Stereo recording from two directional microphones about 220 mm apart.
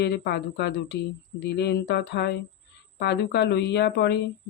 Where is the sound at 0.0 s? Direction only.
50° left (ahead or behind).